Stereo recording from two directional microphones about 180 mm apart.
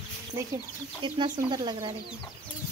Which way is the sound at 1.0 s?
25° right (ahead or behind).